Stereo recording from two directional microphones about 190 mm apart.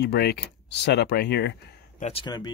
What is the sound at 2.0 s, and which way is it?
Speech, 25° left (ahead or behind).